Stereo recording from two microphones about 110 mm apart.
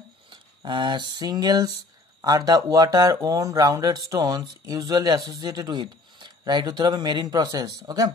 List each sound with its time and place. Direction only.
0.3 s speech: 45° right (ahead or behind)